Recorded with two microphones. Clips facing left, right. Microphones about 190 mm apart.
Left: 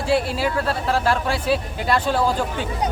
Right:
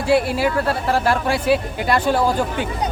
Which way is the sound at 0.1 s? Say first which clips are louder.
Right 4 dB; 10° right (ahead or behind).